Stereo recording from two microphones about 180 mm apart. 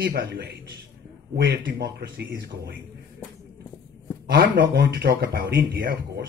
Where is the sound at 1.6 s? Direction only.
70° right (ahead or behind).